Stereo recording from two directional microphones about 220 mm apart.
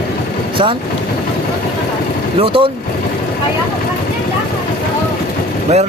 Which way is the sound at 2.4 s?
25° right (ahead or behind).